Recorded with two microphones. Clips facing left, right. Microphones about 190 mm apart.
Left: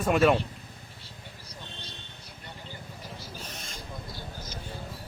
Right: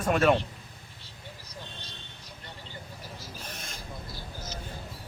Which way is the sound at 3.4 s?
55° right (ahead or behind).